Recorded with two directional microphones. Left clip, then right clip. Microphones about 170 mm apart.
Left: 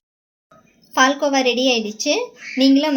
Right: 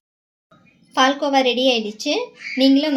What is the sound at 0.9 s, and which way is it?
A woman's voice, centre (ahead or behind).